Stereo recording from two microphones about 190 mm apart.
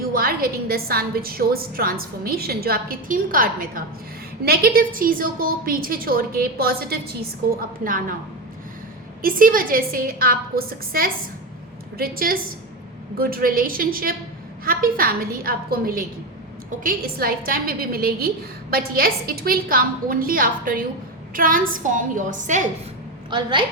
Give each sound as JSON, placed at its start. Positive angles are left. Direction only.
{"t": 0.1, "sound": "a woman's voice", "side_deg": -50}
{"t": 9.2, "sound": "a woman's voice", "side_deg": -50}
{"t": 23.3, "sound": "a woman's voice", "side_deg": -25}